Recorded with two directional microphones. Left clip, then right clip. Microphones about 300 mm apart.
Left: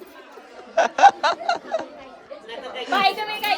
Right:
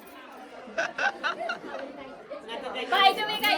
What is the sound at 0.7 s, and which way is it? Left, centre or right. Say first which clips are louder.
Snicker: left 14 dB; centre.